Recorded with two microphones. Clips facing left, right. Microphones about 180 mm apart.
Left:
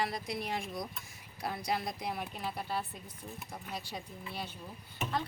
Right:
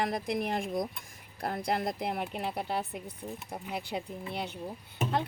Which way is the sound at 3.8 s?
55° right (ahead or behind).